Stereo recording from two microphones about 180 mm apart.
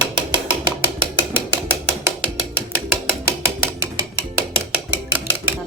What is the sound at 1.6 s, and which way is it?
Mechanisms, 15° right (ahead or behind).